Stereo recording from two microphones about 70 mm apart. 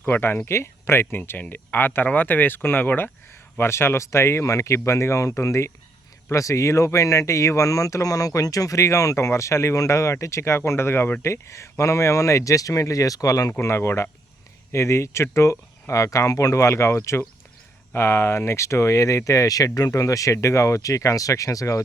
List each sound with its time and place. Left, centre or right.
0.0 s speech: left
13.6 s speech: left